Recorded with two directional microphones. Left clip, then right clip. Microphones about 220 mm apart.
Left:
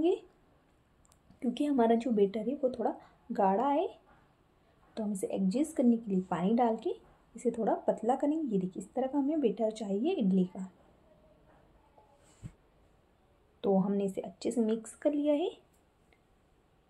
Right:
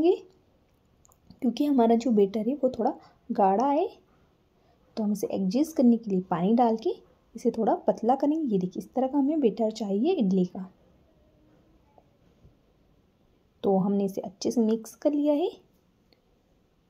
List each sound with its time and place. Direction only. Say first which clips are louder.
1.4 s a woman's voice: right 5 dB; 30° right (ahead or behind)
4.9 s a woman's voice: right 5 dB; 30° right (ahead or behind)
13.6 s a woman's voice: right 5 dB; 30° right (ahead or behind)